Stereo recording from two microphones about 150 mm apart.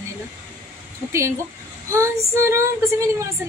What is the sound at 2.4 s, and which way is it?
Speech, 20° right (ahead or behind).